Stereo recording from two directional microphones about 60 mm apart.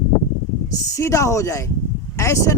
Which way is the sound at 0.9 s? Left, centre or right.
Left.